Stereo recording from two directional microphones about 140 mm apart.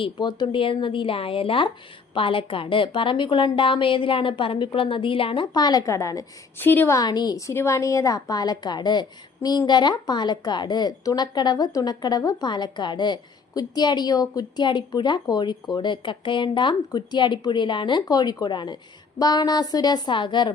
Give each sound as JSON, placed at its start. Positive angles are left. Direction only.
{"t": 0.0, "sound": "a woman's voice", "side_deg": 30}
{"t": 7.0, "sound": "a woman's voice", "side_deg": 30}